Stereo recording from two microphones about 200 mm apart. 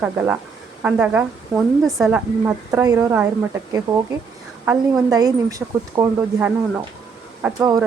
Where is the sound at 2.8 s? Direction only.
15° right (ahead or behind).